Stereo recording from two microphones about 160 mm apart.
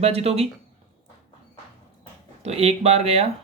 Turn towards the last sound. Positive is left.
turn(degrees=-40)  # may be behind; listen again after turning